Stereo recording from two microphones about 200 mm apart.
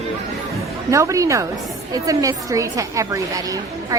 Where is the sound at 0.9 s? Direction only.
15° right (ahead or behind).